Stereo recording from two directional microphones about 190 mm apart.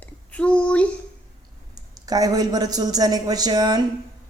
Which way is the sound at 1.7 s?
20° right (ahead or behind).